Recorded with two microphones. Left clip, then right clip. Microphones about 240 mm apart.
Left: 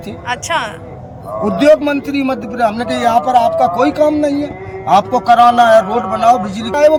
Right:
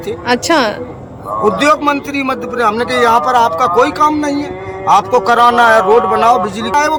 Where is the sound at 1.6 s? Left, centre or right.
Centre.